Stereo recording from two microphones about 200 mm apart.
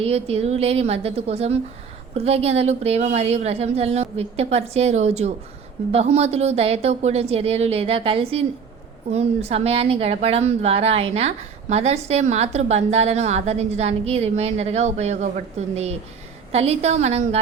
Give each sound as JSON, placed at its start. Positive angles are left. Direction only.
{"t": 0.0, "sound": "a woman's voice", "side_deg": -30}